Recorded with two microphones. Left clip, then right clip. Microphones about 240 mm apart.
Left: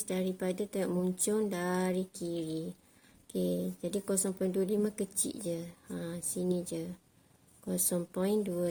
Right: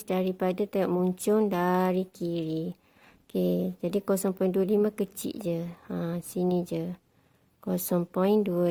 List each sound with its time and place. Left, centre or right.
0.1 s speech: right
3.6 s speech: right